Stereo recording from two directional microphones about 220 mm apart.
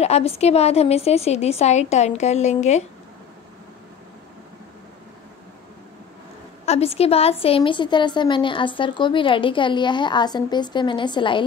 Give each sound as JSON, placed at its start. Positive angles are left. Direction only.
{"t": 0.0, "sound": "a woman's voice", "side_deg": 30}
{"t": 6.6, "sound": "a woman's voice", "side_deg": 30}